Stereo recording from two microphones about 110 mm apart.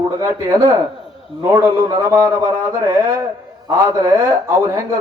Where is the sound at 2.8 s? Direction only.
30° right (ahead or behind).